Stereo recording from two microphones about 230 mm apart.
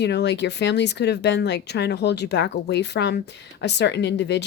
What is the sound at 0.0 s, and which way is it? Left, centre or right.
Speech, left.